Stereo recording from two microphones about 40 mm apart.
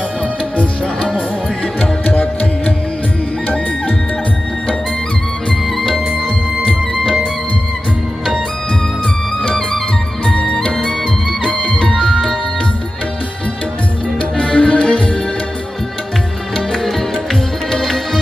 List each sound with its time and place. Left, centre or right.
1.8 s music: left
3.4 s music: left
10.2 s music: centre
14.2 s music: left
16.6 s music: centre